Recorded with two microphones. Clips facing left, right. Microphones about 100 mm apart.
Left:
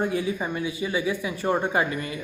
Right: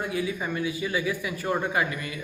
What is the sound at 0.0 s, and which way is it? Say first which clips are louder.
Speech: left 3 dB; 30° left (ahead or behind).